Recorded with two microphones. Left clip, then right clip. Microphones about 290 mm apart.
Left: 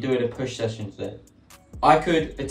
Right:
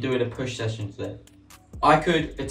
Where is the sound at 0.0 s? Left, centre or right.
Centre.